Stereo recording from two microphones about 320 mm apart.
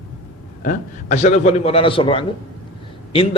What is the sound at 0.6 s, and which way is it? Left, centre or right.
A man's voice, left.